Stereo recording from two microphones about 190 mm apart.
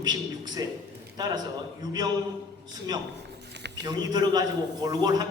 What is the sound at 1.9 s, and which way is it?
Speech, 20° right (ahead or behind).